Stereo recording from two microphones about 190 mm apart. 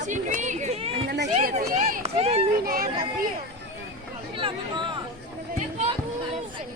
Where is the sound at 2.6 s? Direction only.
50° right (ahead or behind).